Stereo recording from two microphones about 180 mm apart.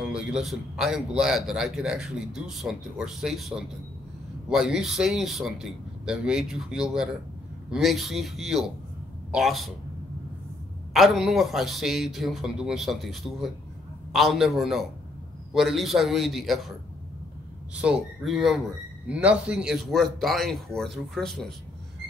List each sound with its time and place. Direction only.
0.0 s a man's voice: 5° right (ahead or behind)
10.9 s a man's voice: centre (ahead or behind)
17.7 s a man's voice: 5° right (ahead or behind)